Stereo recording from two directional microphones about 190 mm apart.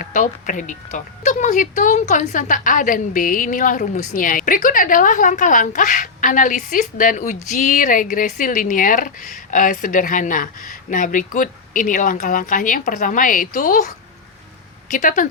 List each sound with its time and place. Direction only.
0.0 s a woman's voice: 40° left (ahead or behind)